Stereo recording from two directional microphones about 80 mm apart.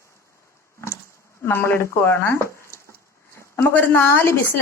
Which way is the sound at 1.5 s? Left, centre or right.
Left.